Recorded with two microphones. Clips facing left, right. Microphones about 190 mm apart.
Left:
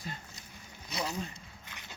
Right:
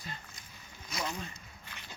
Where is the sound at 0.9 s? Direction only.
35° left (ahead or behind).